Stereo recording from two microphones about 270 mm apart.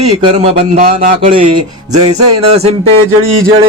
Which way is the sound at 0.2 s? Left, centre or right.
Right.